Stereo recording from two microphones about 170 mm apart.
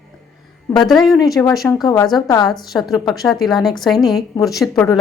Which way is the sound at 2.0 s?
Centre (ahead or behind).